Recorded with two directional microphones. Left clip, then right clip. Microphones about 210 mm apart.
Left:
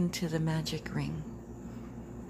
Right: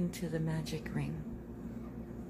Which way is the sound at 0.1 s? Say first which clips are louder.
Left 4 dB; 20° left (ahead or behind).